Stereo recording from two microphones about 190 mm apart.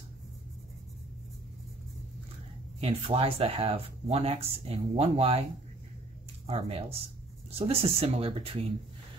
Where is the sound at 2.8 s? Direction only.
30° right (ahead or behind).